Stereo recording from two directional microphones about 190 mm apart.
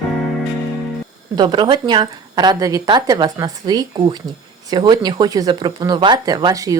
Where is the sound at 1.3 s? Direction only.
25° right (ahead or behind).